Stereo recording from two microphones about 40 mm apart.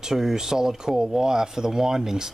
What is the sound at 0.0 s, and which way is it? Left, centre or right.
Speech, centre.